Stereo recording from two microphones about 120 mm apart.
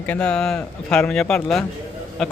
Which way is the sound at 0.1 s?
5° left (ahead or behind).